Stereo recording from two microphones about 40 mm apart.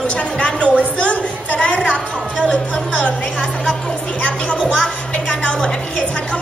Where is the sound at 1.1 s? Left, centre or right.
Left.